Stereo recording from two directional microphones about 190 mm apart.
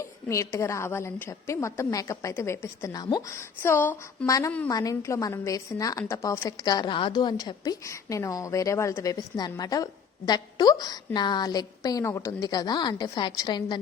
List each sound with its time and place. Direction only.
0.0 s a woman's voice: 15° left (ahead or behind)